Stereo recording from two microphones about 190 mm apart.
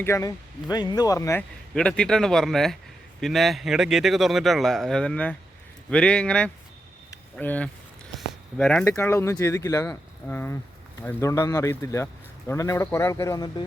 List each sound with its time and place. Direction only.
0.0 s a man's voice: 15° left (ahead or behind)